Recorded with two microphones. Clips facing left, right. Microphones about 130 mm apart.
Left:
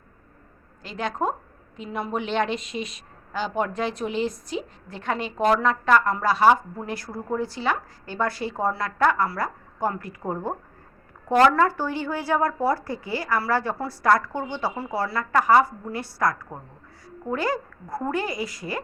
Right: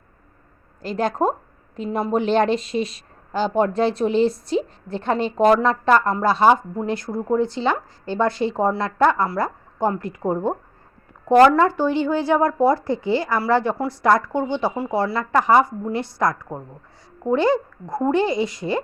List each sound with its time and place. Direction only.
0.8 s a woman's voice: 40° right (ahead or behind)